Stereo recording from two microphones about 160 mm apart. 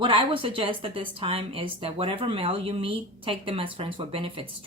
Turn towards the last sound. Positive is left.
turn(degrees=-35)  # may be behind; listen again after turning